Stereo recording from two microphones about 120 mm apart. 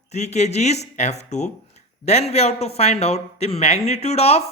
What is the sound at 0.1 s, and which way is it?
Speech, 70° left (ahead or behind).